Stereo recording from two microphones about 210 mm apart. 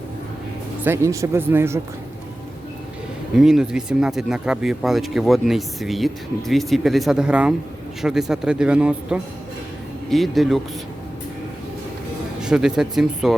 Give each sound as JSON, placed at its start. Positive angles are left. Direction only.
{"t": 0.9, "sound": "speech", "side_deg": -15}
{"t": 3.3, "sound": "speech", "side_deg": 0}
{"t": 12.4, "sound": "speech", "side_deg": -5}